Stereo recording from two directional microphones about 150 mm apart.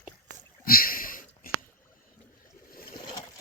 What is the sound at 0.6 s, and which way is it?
Sniff, 75° left (ahead or behind).